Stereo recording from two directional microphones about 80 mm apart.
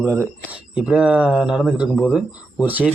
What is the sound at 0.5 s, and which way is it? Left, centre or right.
Speech, centre.